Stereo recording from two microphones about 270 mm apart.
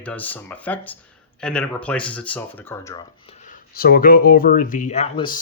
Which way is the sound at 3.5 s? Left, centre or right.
Left.